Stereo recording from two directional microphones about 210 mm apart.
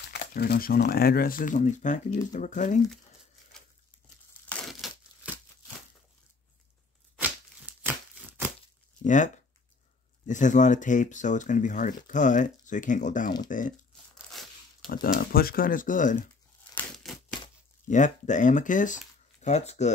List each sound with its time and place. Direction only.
0.1 s speech: 50° left (ahead or behind)
3.5 s crumpling: centre (ahead or behind)
7.2 s a sound: 10° right (ahead or behind)
9.0 s speech: 35° left (ahead or behind)
14.1 s a sound: centre (ahead or behind)
14.9 s speech: 45° left (ahead or behind)
16.7 s crumpling: centre (ahead or behind)
17.8 s speech: 35° left (ahead or behind)